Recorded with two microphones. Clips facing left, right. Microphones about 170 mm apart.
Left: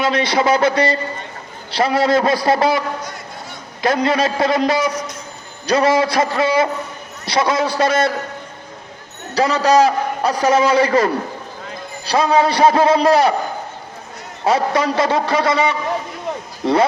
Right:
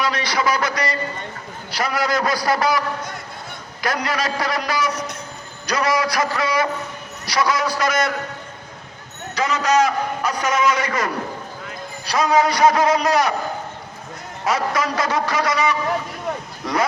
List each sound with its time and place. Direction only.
0.0 s a man's voice: 25° left (ahead or behind)
3.8 s a man's voice: 25° left (ahead or behind)
9.3 s a man's voice: 35° left (ahead or behind)
14.4 s a man's voice: 30° left (ahead or behind)